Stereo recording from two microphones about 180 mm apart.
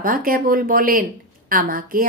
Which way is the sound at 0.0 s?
50° right (ahead or behind).